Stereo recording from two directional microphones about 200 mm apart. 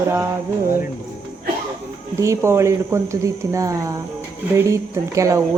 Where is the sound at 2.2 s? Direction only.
15° right (ahead or behind).